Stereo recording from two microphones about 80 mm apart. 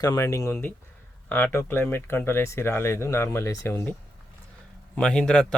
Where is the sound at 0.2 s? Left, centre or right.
Left.